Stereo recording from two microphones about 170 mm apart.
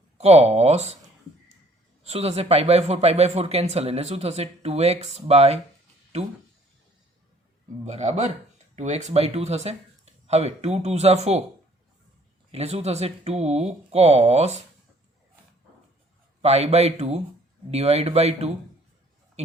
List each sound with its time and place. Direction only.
0.2 s speech: 40° right (ahead or behind)
2.0 s speech: 35° right (ahead or behind)
7.9 s speech: 40° right (ahead or behind)
12.5 s speech: 40° right (ahead or behind)
16.4 s speech: 35° right (ahead or behind)